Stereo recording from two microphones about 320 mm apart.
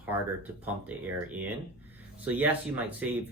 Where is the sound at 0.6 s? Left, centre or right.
Centre.